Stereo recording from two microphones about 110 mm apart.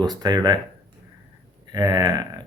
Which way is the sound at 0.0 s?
40° right (ahead or behind).